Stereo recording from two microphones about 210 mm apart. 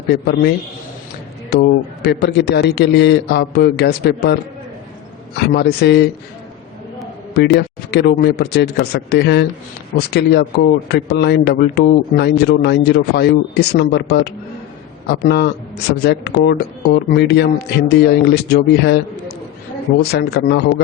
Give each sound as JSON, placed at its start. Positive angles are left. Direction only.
{"t": 0.1, "sound": "speech", "side_deg": 50}
{"t": 1.5, "sound": "speech", "side_deg": 50}
{"t": 5.5, "sound": "speech", "side_deg": 50}
{"t": 7.3, "sound": "speech", "side_deg": 50}
{"t": 20.0, "sound": "speech", "side_deg": 50}